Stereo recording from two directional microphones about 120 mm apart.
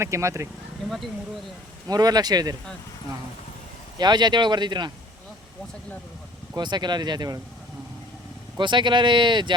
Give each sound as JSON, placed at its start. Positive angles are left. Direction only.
{"t": 0.0, "sound": "speech", "side_deg": -25}
{"t": 1.9, "sound": "speech", "side_deg": -35}
{"t": 3.9, "sound": "speech", "side_deg": -35}
{"t": 6.6, "sound": "speech", "side_deg": -35}
{"t": 8.5, "sound": "speech", "side_deg": -40}